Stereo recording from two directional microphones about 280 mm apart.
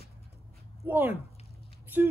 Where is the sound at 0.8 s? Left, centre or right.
Centre.